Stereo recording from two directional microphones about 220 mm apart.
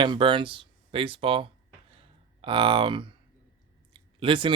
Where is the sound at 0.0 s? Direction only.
20° right (ahead or behind).